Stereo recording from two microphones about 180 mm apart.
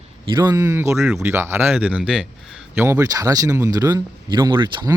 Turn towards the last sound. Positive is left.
turn(degrees=-25)  # may be behind; listen again after turning